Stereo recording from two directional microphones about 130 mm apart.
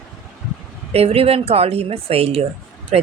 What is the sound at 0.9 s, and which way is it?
Speech, 50° right (ahead or behind).